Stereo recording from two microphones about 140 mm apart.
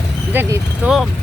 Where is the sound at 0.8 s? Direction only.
10° right (ahead or behind).